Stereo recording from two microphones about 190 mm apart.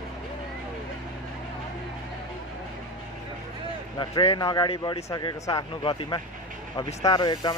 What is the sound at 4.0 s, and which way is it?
Speech, 25° left (ahead or behind).